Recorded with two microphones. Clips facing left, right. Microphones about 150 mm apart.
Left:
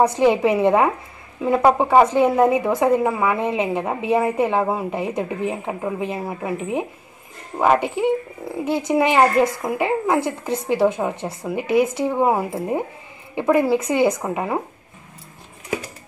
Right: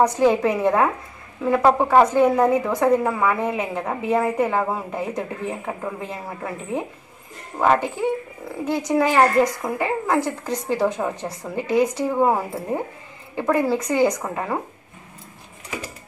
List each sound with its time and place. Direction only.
0.0 s a woman's voice: 15° left (ahead or behind)
8.9 s a woman's voice: 15° left (ahead or behind)